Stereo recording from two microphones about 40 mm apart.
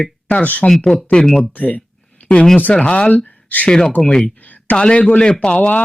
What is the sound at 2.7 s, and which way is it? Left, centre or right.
Speech, left.